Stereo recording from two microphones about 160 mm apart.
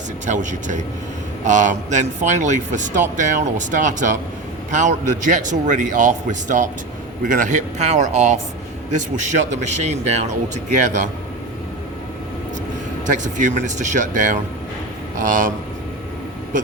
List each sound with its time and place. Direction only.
0.3 s a man's voice: 50° right (ahead or behind)
13.1 s a man's voice: 50° right (ahead or behind)